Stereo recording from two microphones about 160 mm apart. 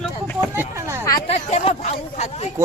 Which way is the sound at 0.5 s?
15° right (ahead or behind).